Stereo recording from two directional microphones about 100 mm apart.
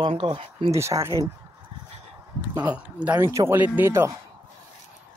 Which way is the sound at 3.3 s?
30° right (ahead or behind).